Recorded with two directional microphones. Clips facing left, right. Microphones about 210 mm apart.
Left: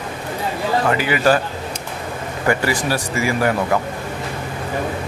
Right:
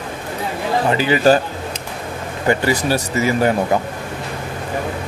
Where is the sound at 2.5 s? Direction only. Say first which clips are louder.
Right 2 dB; 20° right (ahead or behind).